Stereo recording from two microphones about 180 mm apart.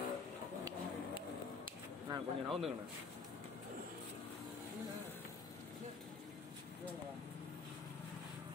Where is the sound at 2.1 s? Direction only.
25° right (ahead or behind).